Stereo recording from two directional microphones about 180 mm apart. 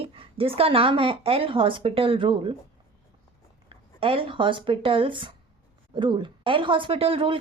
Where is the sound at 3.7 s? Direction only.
30° right (ahead or behind).